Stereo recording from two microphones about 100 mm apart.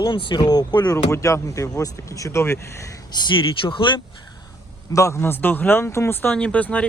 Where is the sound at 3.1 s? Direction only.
50° left (ahead or behind).